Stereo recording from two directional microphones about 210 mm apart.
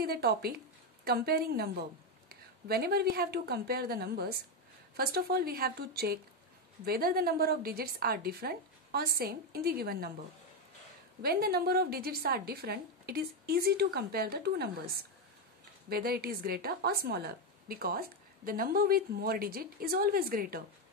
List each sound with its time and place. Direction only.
0.0 s a woman's voice: 50° right (ahead or behind)
11.2 s a woman's voice: 45° right (ahead or behind)